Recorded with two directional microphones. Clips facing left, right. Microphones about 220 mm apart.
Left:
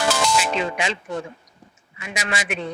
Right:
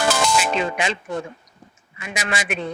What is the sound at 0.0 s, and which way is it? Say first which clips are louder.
Music: right 1 dB; 50° right (ahead or behind).